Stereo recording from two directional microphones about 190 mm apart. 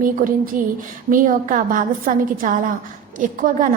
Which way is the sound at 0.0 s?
45° right (ahead or behind).